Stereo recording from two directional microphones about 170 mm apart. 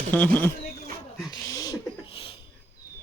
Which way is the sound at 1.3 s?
20° left (ahead or behind).